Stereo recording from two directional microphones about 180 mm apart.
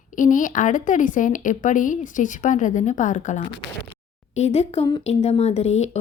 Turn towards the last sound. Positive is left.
turn(degrees=35)  # may be behind; listen again after turning